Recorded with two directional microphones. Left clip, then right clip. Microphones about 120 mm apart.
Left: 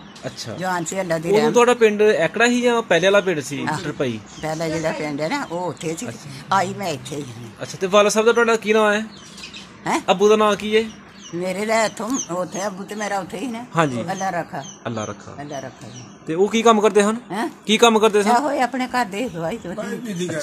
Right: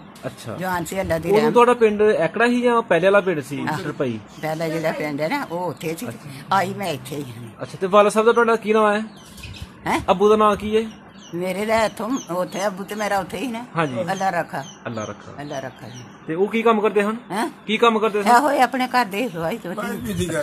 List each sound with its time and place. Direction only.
0.2 s speech: centre (ahead or behind)
16.4 s speech: 50° left (ahead or behind)
17.6 s speech: 90° left
18.2 s speech: 10° right (ahead or behind)
19.8 s speech: 50° right (ahead or behind)